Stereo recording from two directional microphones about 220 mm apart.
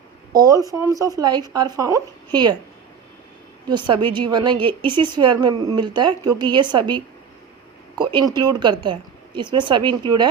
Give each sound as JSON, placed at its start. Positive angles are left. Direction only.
{"t": 0.3, "sound": "speech", "side_deg": -15}
{"t": 3.7, "sound": "a woman's voice", "side_deg": -20}